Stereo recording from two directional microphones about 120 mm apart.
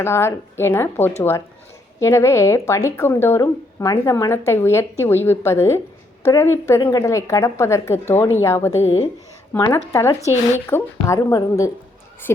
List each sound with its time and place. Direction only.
0.0 s a woman's voice: 20° left (ahead or behind)